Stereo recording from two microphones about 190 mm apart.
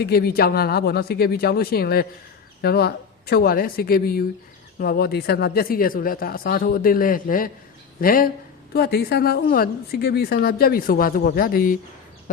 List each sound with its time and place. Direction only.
0.0 s a woman's voice: 55° left (ahead or behind)